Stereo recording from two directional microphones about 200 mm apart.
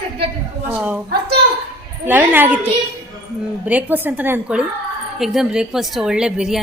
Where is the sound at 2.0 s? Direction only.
10° right (ahead or behind).